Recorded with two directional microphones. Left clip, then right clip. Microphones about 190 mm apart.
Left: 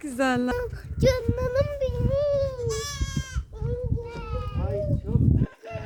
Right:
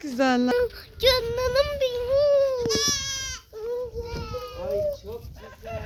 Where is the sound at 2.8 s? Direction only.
75° left (ahead or behind).